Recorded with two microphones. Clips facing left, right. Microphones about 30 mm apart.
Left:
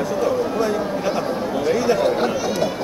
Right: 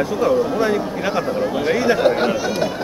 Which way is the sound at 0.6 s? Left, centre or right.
Right.